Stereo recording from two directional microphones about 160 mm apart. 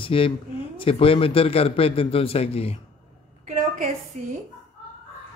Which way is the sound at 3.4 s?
45° right (ahead or behind).